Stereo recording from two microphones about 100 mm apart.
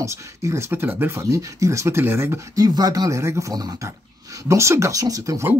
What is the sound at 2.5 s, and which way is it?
Speech, 40° right (ahead or behind).